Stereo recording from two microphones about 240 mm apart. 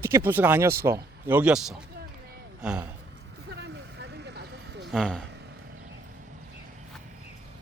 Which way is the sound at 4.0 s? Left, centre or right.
Right.